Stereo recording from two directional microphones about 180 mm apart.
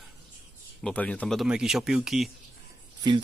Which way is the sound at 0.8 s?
5° left (ahead or behind).